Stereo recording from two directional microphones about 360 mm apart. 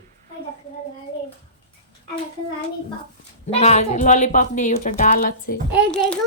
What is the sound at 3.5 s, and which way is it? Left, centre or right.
A woman's voice, centre.